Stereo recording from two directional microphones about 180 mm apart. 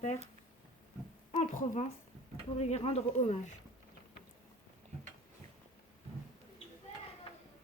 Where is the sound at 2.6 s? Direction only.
35° left (ahead or behind).